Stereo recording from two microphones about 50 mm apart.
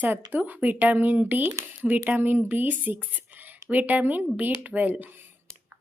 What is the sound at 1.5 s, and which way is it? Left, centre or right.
Speech, right.